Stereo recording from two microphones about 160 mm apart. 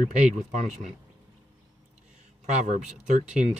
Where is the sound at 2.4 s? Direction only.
45° right (ahead or behind).